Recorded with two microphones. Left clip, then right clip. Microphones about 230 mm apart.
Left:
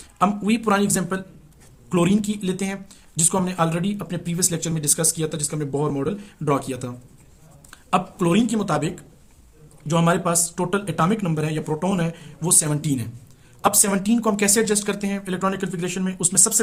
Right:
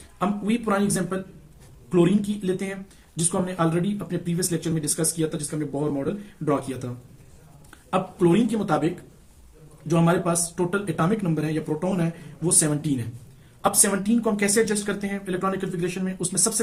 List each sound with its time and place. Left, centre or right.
0.2 s speech: left